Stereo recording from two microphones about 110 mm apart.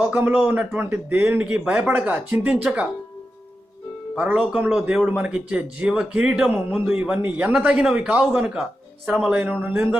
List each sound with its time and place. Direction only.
0.0 s speech: 20° right (ahead or behind)
4.1 s speech: 10° right (ahead or behind)